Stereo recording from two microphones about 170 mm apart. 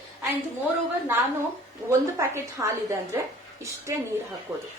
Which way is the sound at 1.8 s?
15° right (ahead or behind).